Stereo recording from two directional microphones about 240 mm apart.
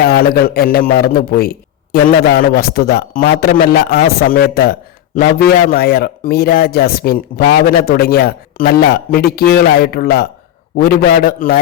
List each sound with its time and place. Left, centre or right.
0.0 s a man's voice: left